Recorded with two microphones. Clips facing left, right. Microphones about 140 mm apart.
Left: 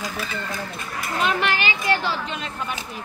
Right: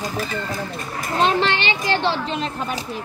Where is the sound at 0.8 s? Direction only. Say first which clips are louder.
Right 6 dB; 35° right (ahead or behind).